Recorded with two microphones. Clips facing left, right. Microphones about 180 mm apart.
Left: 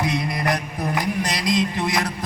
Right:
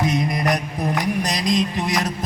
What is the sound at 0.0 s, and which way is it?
Mantra, 20° right (ahead or behind).